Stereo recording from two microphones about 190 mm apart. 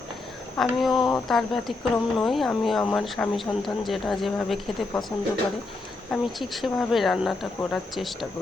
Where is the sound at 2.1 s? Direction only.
Centre (ahead or behind).